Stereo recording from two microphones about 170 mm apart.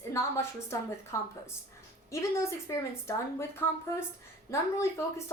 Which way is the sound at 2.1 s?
15° left (ahead or behind).